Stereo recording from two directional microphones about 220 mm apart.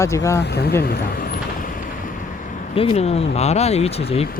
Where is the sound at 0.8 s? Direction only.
45° left (ahead or behind); by 3.2 s 30° left (ahead or behind).